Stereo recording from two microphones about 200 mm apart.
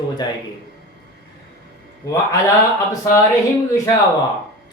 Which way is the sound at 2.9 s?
15° left (ahead or behind).